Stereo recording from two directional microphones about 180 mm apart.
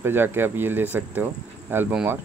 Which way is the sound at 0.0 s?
10° right (ahead or behind).